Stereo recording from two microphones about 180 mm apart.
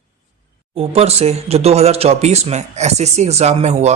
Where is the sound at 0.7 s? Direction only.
35° right (ahead or behind).